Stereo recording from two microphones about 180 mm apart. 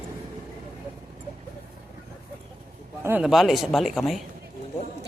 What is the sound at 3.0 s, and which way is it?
Speech, 10° right (ahead or behind).